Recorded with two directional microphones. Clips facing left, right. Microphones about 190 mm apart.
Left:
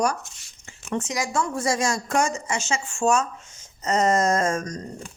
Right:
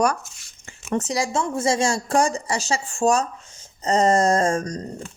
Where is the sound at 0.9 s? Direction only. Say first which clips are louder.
Right 3 dB; 35° right (ahead or behind).